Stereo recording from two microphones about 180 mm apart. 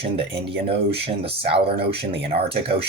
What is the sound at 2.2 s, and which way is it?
Speech, 30° right (ahead or behind).